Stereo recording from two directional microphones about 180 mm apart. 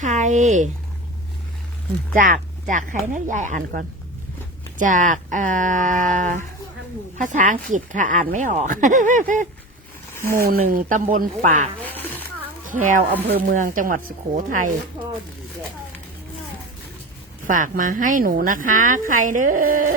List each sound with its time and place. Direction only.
0.0 s a woman's voice: 40° right (ahead or behind)
2.1 s a woman's voice: 50° right (ahead or behind)
15.0 s speech: 25° right (ahead or behind)
17.4 s a woman's voice: 45° right (ahead or behind)